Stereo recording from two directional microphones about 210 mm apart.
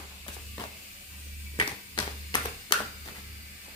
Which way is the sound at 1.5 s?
20° left (ahead or behind).